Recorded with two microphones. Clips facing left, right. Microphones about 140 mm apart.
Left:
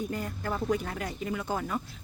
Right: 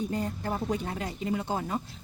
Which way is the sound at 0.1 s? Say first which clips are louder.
Right 2 dB; 30° right (ahead or behind).